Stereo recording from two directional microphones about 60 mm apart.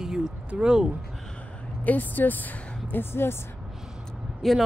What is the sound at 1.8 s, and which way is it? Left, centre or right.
Speech, left.